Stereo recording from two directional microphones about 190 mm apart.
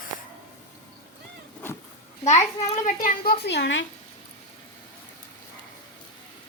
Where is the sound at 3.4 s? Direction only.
70° left (ahead or behind).